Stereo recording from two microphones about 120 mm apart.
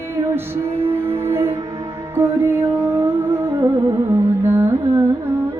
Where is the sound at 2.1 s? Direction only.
20° right (ahead or behind).